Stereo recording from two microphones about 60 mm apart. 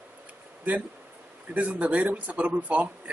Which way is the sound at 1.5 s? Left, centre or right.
Right.